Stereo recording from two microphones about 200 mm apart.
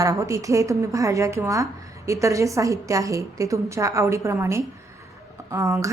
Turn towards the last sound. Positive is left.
turn(degrees=-15)  # may be behind; listen again after turning